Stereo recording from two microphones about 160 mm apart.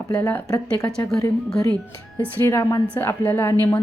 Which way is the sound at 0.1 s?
10° left (ahead or behind).